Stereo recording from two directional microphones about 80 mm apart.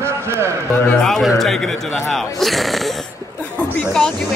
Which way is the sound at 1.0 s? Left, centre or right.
Centre.